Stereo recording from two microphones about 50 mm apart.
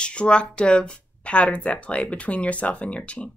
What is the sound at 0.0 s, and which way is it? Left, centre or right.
Speech, left.